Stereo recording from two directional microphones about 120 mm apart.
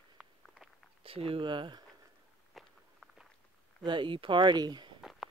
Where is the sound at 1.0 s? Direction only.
50° right (ahead or behind).